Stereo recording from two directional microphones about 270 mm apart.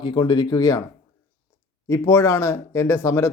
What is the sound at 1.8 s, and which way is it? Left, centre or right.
Speech, centre.